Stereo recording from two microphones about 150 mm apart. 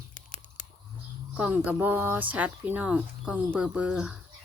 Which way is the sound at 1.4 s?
10° right (ahead or behind).